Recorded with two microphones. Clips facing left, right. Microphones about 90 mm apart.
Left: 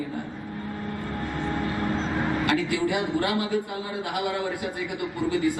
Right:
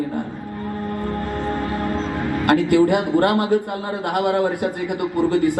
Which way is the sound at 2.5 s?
55° right (ahead or behind).